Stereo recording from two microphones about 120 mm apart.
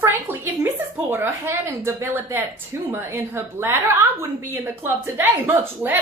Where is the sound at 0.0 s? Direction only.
20° right (ahead or behind).